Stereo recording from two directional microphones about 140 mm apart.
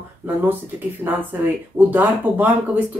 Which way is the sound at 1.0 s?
10° right (ahead or behind).